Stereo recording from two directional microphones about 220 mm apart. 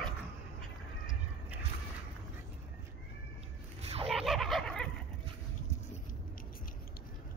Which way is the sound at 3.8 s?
25° right (ahead or behind).